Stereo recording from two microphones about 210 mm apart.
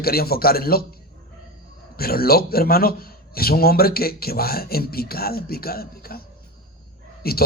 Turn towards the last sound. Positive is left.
turn(degrees=45)  # may be behind; listen again after turning